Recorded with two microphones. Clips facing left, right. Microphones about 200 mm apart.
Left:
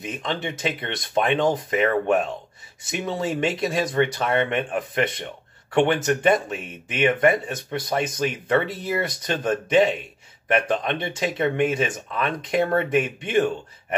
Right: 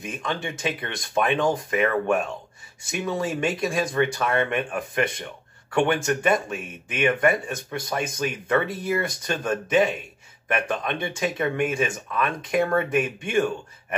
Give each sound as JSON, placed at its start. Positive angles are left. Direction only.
{"t": 0.0, "sound": "speech", "side_deg": 25}